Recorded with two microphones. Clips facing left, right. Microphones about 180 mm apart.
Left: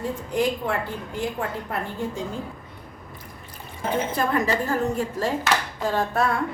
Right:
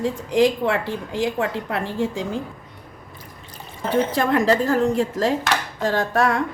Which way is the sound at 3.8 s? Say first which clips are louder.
Right 4 dB; 90° right.